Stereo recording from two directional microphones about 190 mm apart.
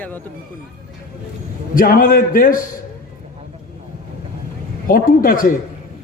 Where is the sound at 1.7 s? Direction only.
45° left (ahead or behind).